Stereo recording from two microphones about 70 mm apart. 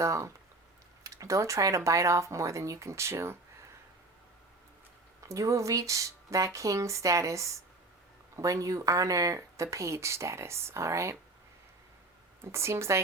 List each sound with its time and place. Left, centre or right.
0.0 s speech: right
5.2 s speech: right
12.5 s speech: right